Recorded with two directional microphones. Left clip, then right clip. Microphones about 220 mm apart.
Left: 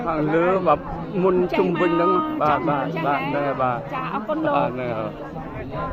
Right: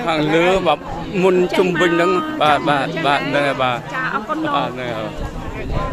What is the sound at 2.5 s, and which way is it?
Speech, 25° right (ahead or behind).